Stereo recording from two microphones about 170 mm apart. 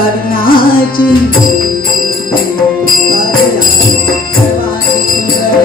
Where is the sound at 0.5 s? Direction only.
60° left (ahead or behind).